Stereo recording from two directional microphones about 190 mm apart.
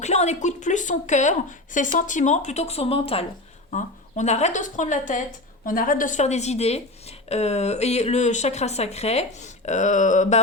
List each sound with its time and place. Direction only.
0.0 s a woman's voice: 35° left (ahead or behind)